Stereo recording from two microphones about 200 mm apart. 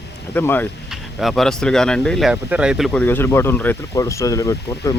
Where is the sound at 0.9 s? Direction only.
Centre (ahead or behind).